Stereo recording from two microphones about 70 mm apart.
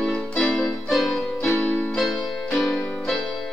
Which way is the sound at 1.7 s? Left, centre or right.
Left.